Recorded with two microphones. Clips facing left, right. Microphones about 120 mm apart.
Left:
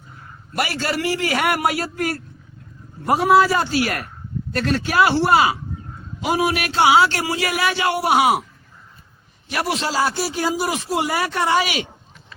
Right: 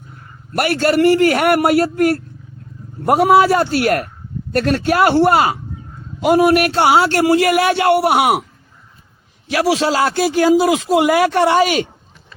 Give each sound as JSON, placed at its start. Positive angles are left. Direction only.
{"t": 0.5, "sound": "a man's voice", "side_deg": -55}
{"t": 9.5, "sound": "a man's voice", "side_deg": -90}
{"t": 11.5, "sound": "a man's voice", "side_deg": -45}